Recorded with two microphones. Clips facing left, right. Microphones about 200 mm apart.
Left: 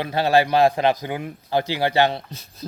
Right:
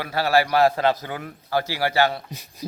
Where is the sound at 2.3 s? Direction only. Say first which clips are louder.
Right 1 dB; 15° right (ahead or behind).